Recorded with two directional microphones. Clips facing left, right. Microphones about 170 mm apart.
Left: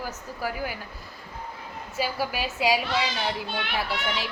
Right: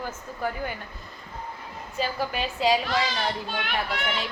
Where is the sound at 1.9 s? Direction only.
10° left (ahead or behind).